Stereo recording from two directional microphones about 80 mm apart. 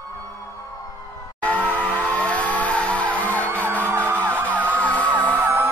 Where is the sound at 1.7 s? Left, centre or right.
Centre.